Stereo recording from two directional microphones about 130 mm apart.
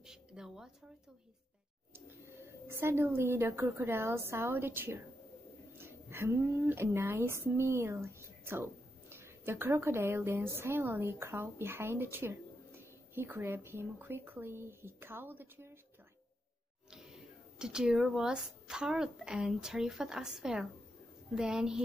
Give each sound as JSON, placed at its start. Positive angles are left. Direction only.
{"t": 0.0, "sound": "a sound", "side_deg": -5}
{"t": 2.7, "sound": "a woman's voice", "side_deg": -20}
{"t": 17.6, "sound": "a woman's voice", "side_deg": -5}